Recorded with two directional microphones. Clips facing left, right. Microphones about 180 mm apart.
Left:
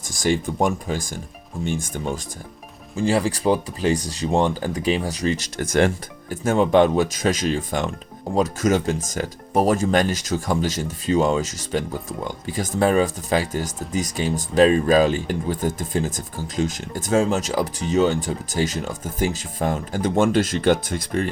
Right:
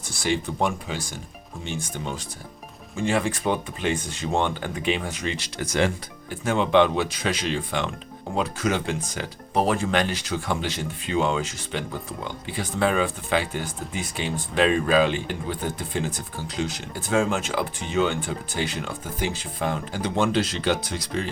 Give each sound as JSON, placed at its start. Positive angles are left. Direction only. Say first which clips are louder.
{"t": 0.2, "sound": "speech", "louder": "left 4 dB", "side_deg": 45}
{"t": 2.9, "sound": "speech", "louder": "left 4 dB", "side_deg": 35}